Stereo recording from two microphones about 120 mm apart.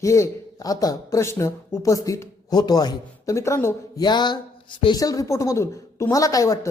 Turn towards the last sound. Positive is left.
turn(degrees=25)  # may be behind; listen again after turning